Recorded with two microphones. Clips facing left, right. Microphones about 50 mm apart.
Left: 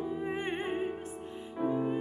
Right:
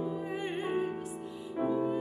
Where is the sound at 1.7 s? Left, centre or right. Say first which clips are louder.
Right 1 dB; left.